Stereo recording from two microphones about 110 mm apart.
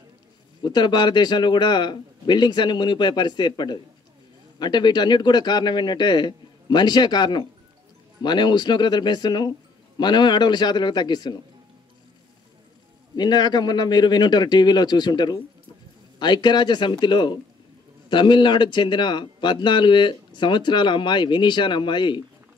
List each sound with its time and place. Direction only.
0.6 s a man's voice: 40° left (ahead or behind)
13.1 s a man's voice: 40° left (ahead or behind)